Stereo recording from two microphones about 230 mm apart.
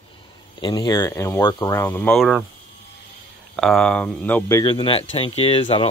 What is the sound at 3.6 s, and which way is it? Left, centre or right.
Speech, centre.